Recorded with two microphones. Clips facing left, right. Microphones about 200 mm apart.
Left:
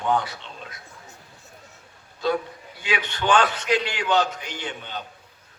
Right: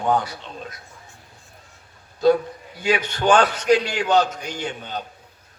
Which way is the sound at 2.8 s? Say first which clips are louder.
Right 5 dB; 45° right (ahead or behind).